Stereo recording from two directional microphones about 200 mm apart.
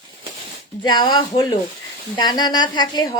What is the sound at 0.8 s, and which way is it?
A woman's voice, 20° left (ahead or behind).